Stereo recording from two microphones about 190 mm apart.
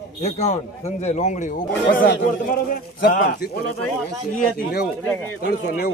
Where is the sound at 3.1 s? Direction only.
45° left (ahead or behind).